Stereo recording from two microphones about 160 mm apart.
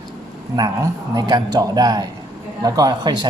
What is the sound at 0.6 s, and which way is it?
Speech, 25° right (ahead or behind).